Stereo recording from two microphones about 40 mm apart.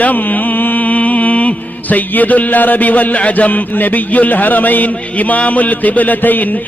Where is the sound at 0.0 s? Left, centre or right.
Left.